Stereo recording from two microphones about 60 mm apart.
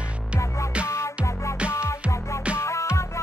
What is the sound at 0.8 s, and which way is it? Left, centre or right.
Music, left.